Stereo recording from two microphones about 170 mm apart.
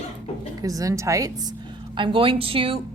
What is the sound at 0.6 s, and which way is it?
Speech, 20° right (ahead or behind).